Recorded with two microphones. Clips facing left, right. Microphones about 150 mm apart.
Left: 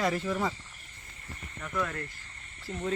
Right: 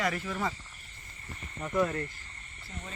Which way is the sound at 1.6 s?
30° right (ahead or behind).